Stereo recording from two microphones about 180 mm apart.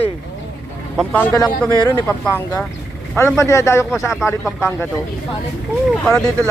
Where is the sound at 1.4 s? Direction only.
20° left (ahead or behind).